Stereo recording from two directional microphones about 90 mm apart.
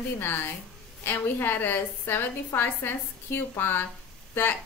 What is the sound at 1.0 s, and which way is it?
Speech, 25° left (ahead or behind).